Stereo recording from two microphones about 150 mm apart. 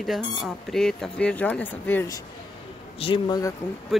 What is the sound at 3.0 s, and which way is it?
Speech, 35° left (ahead or behind).